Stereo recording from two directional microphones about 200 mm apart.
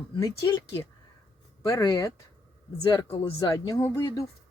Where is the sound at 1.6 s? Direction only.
15° left (ahead or behind).